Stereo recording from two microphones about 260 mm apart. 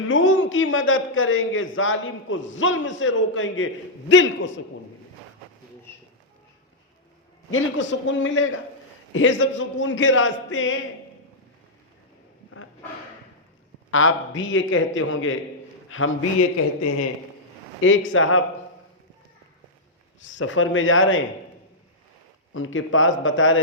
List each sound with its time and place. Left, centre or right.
0.0 s a man's voice: left
7.5 s a man's voice: left
13.9 s a man's voice: left
20.2 s a man's voice: left
22.5 s a man's voice: left